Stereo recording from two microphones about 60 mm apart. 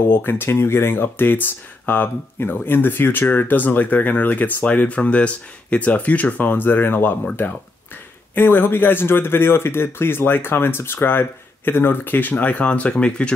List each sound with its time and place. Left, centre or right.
0.1 s speech: left
8.4 s speech: left; by 13.3 s centre